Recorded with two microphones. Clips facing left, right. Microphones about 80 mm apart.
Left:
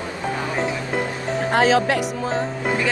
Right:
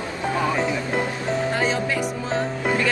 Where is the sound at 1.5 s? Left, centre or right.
Left.